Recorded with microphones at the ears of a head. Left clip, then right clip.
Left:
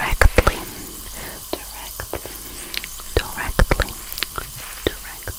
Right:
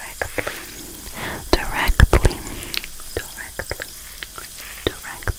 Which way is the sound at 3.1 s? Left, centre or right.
Left.